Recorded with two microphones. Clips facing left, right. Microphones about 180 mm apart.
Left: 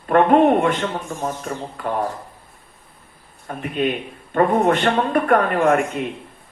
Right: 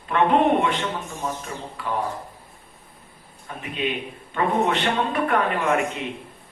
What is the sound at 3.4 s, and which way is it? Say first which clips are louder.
A man's voice: left 6 dB; 50° left (ahead or behind).